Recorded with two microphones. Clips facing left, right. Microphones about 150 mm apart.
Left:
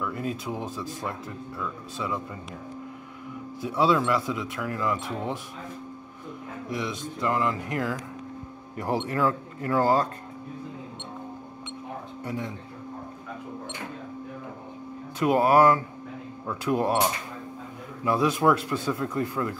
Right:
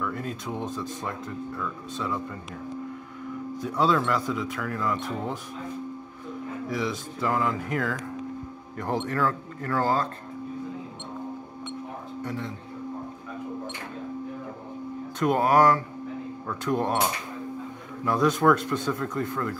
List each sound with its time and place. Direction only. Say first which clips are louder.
0.0 s speech: left 1 dB; 5° left (ahead or behind)
3.6 s speech: left 1 dB; 5° left (ahead or behind)
6.8 s a man's voice: left 1 dB; 5° right (ahead or behind); by 10.0 s 15° left (ahead or behind)
15.1 s speech: left 1 dB; 5° left (ahead or behind)
18.0 s speech: right 1 dB; 5° left (ahead or behind)